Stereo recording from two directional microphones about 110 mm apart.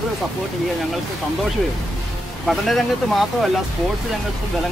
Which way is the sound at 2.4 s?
Centre (ahead or behind).